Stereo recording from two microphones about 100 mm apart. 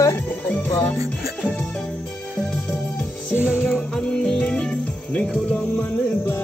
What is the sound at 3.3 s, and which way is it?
Music, 15° right (ahead or behind).